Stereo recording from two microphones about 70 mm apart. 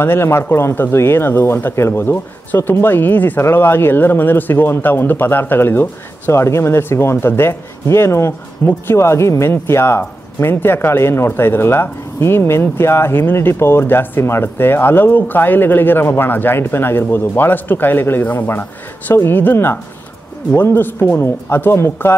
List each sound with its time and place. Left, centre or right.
0.0 s speech: left